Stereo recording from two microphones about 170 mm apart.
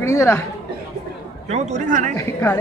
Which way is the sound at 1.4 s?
40° right (ahead or behind).